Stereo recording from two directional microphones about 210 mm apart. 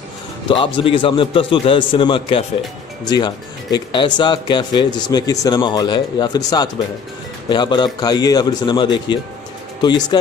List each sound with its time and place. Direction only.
0.7 s speech: 25° left (ahead or behind)